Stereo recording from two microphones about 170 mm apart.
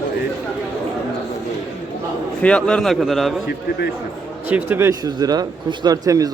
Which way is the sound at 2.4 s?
5° left (ahead or behind).